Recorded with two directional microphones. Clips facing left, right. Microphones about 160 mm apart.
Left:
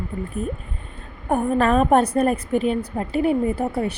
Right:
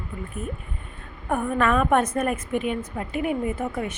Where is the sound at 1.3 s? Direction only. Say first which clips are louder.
Left 4 dB; 30° left (ahead or behind).